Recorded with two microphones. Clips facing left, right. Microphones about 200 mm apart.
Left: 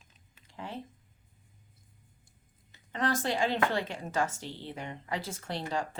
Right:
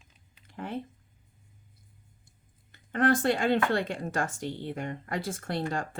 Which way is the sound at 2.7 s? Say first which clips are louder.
Right 6 dB; 55° right (ahead or behind).